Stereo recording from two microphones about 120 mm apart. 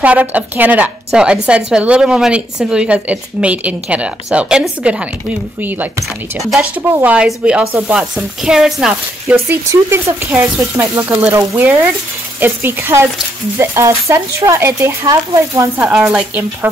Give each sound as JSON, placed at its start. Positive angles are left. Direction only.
{"t": 0.0, "sound": "a woman's voice", "side_deg": -10}
{"t": 6.4, "sound": "a woman's voice", "side_deg": -5}
{"t": 9.3, "sound": "a woman's voice", "side_deg": -20}
{"t": 15.8, "sound": "a woman's voice", "side_deg": -5}